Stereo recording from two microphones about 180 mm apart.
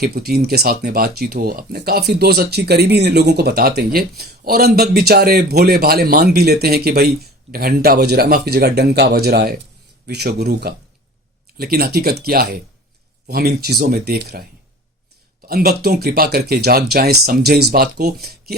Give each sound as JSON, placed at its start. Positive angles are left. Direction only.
{"t": 0.0, "sound": "speech", "side_deg": -60}
{"t": 15.4, "sound": "speech", "side_deg": -60}